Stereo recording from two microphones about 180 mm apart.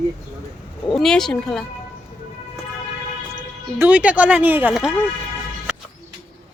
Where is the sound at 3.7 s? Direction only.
10° right (ahead or behind).